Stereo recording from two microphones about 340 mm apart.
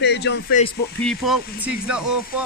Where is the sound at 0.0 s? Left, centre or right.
Left.